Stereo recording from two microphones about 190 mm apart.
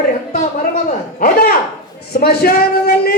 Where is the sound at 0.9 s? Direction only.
50° left (ahead or behind).